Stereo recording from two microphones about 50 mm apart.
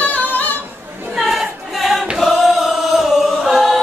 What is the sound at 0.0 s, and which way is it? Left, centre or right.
A capella, left.